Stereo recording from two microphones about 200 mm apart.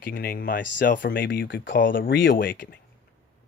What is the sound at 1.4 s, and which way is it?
Speech, 65° left (ahead or behind).